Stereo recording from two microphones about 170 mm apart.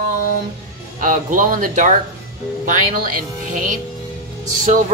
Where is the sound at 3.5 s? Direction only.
50° right (ahead or behind).